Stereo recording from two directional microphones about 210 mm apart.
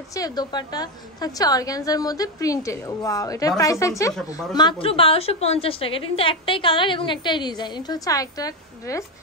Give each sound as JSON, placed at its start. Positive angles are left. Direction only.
{"t": 0.1, "sound": "a woman's voice", "side_deg": 20}